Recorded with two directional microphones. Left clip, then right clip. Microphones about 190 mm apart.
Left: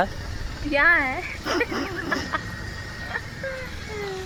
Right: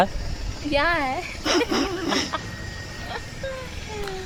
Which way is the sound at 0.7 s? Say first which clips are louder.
Left 3 dB; 15° right (ahead or behind).